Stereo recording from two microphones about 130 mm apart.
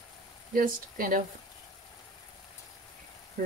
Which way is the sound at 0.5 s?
90° right.